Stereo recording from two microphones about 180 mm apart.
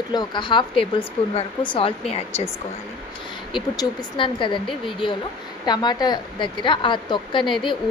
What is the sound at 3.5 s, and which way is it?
A woman's voice, 25° left (ahead or behind).